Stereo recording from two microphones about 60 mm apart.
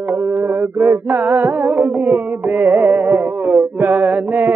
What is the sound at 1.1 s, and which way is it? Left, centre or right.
Music, right.